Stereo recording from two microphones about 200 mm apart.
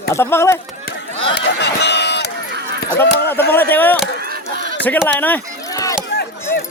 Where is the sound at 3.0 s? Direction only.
55° left (ahead or behind).